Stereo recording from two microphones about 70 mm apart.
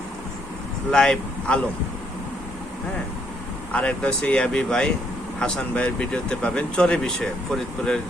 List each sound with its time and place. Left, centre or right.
0.9 s speech: centre
3.7 s speech: centre